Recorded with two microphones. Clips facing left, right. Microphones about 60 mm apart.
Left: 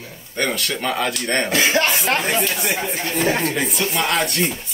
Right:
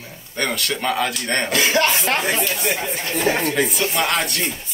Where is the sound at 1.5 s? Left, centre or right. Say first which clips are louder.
Right 1 dB; left.